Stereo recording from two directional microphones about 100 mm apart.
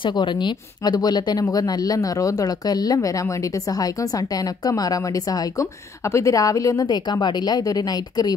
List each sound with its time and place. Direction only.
0.0 s speech: 50° left (ahead or behind)